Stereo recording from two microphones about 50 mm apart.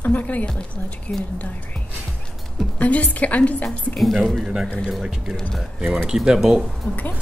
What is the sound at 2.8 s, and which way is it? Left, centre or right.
Speech, left.